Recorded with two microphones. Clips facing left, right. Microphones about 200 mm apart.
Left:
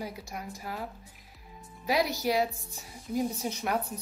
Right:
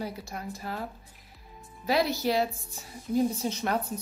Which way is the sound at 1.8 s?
15° left (ahead or behind).